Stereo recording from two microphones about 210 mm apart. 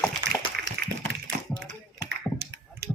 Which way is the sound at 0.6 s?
45° right (ahead or behind).